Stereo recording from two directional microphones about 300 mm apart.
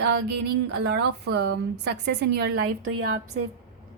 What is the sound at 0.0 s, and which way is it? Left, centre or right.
Speech, right.